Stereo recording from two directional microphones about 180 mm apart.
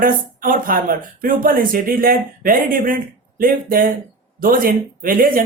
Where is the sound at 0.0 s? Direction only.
50° right (ahead or behind).